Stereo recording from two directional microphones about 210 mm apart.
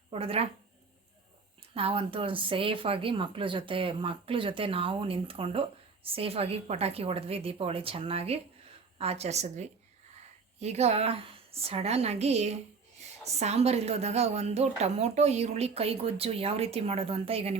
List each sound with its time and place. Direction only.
0.1 s a woman's voice: 30° right (ahead or behind)
1.7 s a woman's voice: 25° right (ahead or behind)